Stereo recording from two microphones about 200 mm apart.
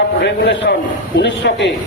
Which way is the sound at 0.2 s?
60° left (ahead or behind).